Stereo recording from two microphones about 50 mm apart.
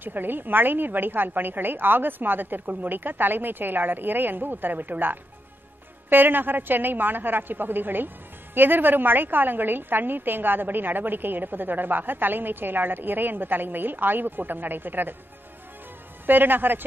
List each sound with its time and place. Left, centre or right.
0.0 s a woman's voice: right
16.3 s a woman's voice: right